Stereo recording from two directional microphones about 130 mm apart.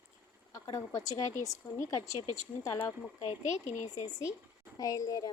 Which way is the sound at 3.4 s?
65° left (ahead or behind).